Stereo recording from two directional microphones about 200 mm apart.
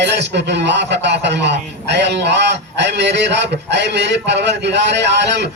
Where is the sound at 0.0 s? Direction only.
60° right (ahead or behind).